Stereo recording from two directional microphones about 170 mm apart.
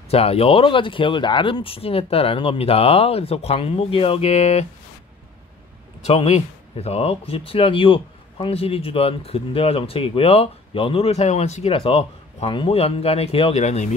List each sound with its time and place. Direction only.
0.1 s speech: 35° left (ahead or behind)
6.0 s speech: 40° left (ahead or behind)